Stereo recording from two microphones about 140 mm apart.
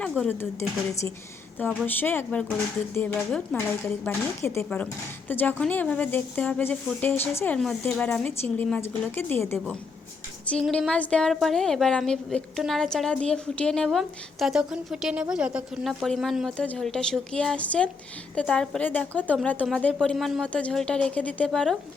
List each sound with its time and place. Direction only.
0.2 s a woman's voice: 10° left (ahead or behind)
1.9 s a woman's voice: 15° left (ahead or behind)
4.0 s a woman's voice: 20° left (ahead or behind)